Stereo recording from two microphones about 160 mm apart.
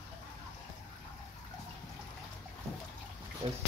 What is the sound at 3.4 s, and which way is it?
Speech, 30° right (ahead or behind).